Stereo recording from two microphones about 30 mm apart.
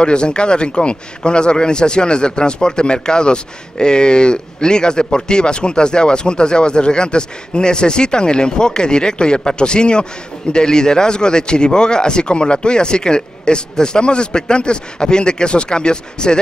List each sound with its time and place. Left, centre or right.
0.0 s a man's voice: left